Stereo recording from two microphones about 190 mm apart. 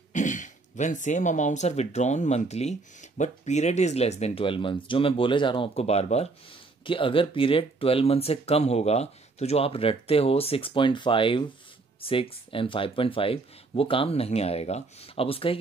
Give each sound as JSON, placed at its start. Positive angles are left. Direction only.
{"t": 0.1, "sound": "speech", "side_deg": 40}